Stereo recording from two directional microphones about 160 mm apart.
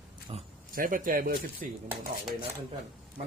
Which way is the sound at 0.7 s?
60° right (ahead or behind).